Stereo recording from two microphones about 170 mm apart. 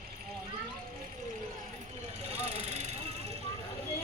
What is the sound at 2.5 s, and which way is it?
Vehicle, 40° right (ahead or behind).